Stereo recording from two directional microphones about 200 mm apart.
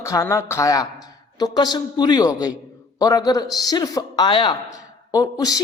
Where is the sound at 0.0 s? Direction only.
15° left (ahead or behind).